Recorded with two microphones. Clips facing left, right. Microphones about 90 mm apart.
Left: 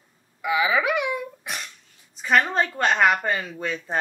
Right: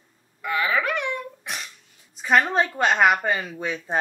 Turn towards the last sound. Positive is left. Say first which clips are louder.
# right 1 dB
turn(degrees=-5)  # may be behind; listen again after turning